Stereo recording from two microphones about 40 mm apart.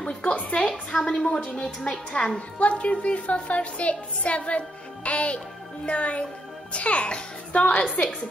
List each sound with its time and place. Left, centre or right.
0.0 s a woman's voice: left
0.6 s a woman's voice: centre
2.1 s a woman's voice: left